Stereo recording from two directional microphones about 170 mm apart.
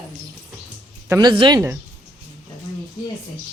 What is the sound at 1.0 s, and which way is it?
Speech, 20° right (ahead or behind).